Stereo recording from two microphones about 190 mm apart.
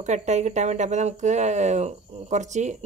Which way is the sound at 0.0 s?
40° right (ahead or behind).